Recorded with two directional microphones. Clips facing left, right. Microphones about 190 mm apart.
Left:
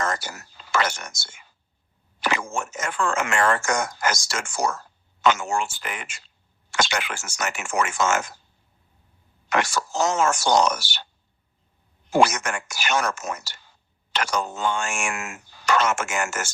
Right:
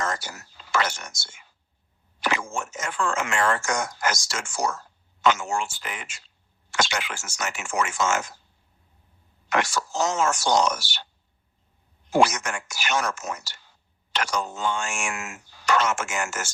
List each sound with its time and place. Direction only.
0.0 s whispering: 55° left (ahead or behind)
2.2 s speech: 55° left (ahead or behind)
9.5 s speech: 55° left (ahead or behind)
12.1 s speech: 55° left (ahead or behind)